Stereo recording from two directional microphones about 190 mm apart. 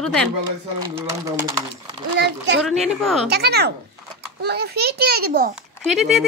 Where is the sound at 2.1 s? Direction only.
65° right (ahead or behind).